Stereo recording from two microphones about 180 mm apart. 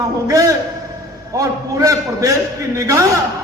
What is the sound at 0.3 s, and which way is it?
A man's voice, 20° right (ahead or behind).